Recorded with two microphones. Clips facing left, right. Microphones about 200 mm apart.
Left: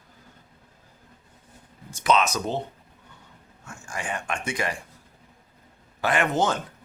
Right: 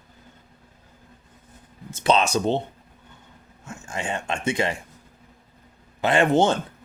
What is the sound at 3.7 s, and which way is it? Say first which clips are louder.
Speech: right 3 dB; 25° right (ahead or behind).